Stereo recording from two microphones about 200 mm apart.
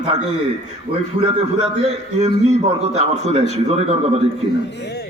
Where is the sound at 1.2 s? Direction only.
30° right (ahead or behind).